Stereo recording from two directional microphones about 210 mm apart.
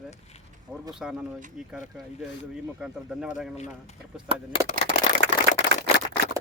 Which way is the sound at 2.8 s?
5° right (ahead or behind).